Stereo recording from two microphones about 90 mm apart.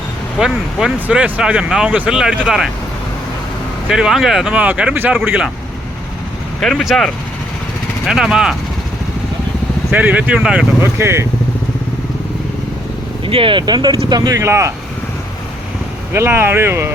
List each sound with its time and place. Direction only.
0.3 s speech: 5° right (ahead or behind)
3.8 s speech: 5° right (ahead or behind)
4.5 s speech: 15° right (ahead or behind)
6.6 s speech: centre (ahead or behind)
9.9 s speech: 15° right (ahead or behind)
10.8 s speech: 30° right (ahead or behind)
13.2 s speech: 75° right (ahead or behind); by 14.7 s 30° right (ahead or behind)
16.1 s speech: 25° right (ahead or behind)